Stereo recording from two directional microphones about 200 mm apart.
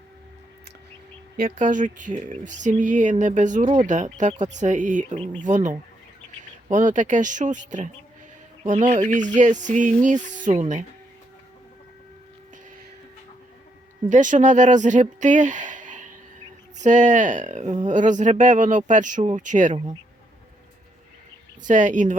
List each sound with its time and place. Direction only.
1.4 s speech: 40° right (ahead or behind)
14.1 s speech: 40° right (ahead or behind)
21.6 s speech: 40° right (ahead or behind)